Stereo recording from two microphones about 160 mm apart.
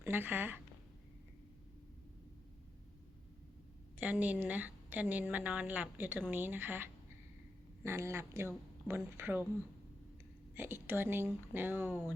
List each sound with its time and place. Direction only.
0.0 s a woman's voice: 15° right (ahead or behind)
3.9 s a woman's voice: 10° right (ahead or behind)
10.5 s a woman's voice: 15° right (ahead or behind)